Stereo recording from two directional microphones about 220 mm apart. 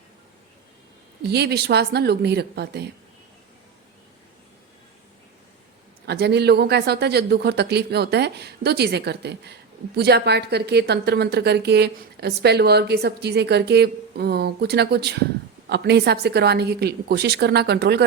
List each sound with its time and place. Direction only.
1.3 s speech: 50° right (ahead or behind)
6.1 s speech: 50° right (ahead or behind)